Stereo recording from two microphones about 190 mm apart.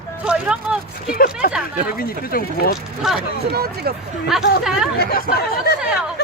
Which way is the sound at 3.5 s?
55° right (ahead or behind).